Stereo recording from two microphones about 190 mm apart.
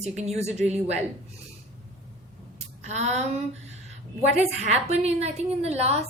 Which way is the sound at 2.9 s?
35° right (ahead or behind).